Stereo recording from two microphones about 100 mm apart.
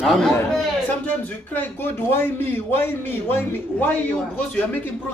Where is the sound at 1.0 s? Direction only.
20° left (ahead or behind).